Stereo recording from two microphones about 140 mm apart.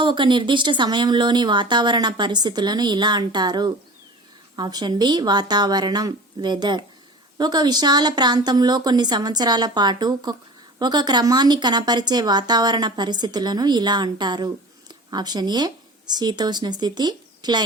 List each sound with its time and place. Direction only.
0.0 s a woman's voice: 35° right (ahead or behind)